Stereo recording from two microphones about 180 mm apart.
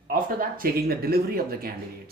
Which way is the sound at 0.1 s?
55° right (ahead or behind).